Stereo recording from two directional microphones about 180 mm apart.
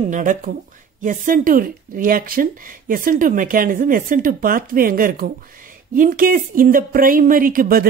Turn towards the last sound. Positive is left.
turn(degrees=-55)  # may be behind; listen again after turning